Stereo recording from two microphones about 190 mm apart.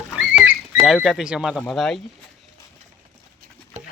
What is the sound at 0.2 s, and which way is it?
Rodents, 10° right (ahead or behind).